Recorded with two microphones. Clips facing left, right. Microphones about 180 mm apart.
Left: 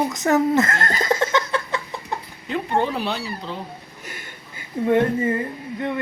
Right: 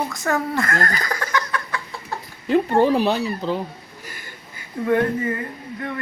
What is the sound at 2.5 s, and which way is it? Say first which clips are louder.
A woman's voice: right 6 dB; 40° right (ahead or behind).